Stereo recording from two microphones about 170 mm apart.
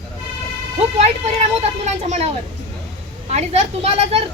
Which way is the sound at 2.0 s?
40° right (ahead or behind).